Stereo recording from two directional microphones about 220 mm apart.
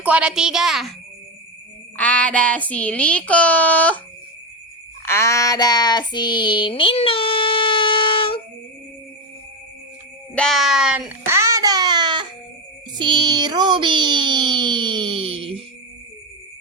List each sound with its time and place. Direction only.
0.0 s speech: 5° right (ahead or behind)
2.0 s speech: 5° left (ahead or behind)
5.0 s female singing: 10° left (ahead or behind)
10.3 s a sound: centre (ahead or behind); by 12.3 s 20° right (ahead or behind)
13.0 s speech: 20° right (ahead or behind)